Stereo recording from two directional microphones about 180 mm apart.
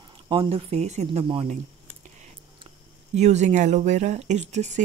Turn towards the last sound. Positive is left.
turn(degrees=-40)  # may be behind; listen again after turning